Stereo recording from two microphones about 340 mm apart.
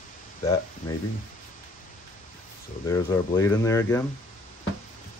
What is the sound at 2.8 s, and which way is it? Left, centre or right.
Speech, centre.